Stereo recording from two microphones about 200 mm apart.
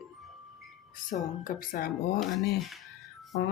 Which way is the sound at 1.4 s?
45° left (ahead or behind).